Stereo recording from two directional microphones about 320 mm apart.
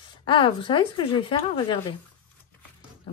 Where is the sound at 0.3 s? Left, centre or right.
Centre.